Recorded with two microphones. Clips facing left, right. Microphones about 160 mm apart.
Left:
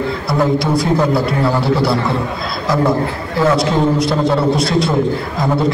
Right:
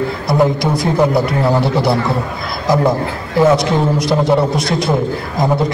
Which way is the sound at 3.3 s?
20° right (ahead or behind).